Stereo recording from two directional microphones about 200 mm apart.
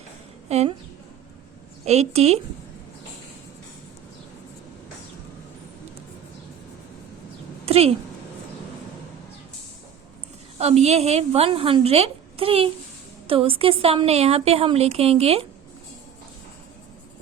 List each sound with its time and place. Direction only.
0.4 s a woman's voice: 35° right (ahead or behind)
1.8 s a woman's voice: 35° right (ahead or behind)
7.6 s a sound: 30° right (ahead or behind)
10.6 s a woman's voice: 30° right (ahead or behind)